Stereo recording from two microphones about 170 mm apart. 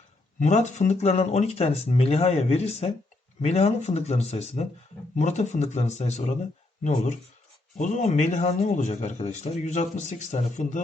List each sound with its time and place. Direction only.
0.3 s speech: 45° left (ahead or behind)